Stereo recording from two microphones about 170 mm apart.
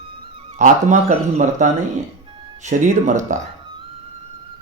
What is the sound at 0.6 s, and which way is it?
Speech, 45° right (ahead or behind).